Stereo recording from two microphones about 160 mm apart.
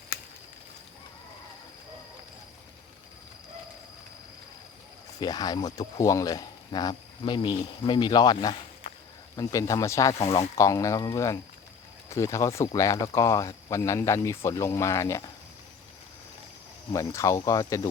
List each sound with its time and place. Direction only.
5.2 s speech: 25° left (ahead or behind)
16.9 s speech: 20° left (ahead or behind)